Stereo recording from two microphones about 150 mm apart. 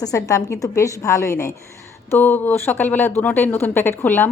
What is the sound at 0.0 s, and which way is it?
A woman's voice, 20° left (ahead or behind).